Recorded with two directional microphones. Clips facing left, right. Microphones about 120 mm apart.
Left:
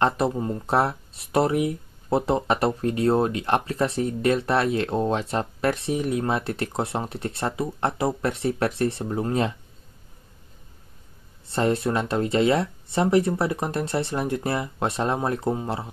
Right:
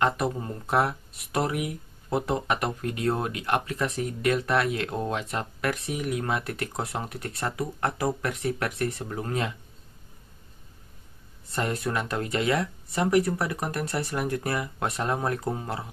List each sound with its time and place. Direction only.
0.0 s speech: 30° left (ahead or behind)
11.4 s speech: 30° left (ahead or behind)